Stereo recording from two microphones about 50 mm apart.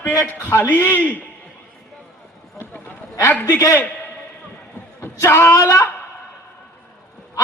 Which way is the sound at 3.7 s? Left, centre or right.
Left.